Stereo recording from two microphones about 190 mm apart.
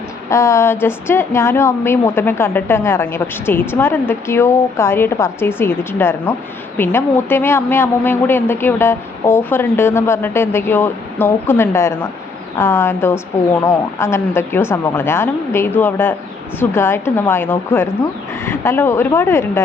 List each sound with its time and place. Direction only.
0.3 s a woman's voice: 15° left (ahead or behind)